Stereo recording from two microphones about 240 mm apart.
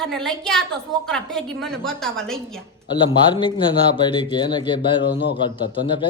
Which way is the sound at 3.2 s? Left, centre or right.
Centre.